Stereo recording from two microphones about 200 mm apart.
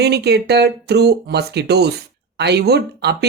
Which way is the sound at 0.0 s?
55° right (ahead or behind).